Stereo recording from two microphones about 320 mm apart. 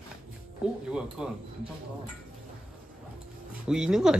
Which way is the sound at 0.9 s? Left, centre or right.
Centre.